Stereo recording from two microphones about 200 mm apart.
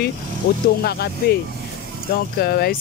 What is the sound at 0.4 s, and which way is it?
Speech, 55° left (ahead or behind).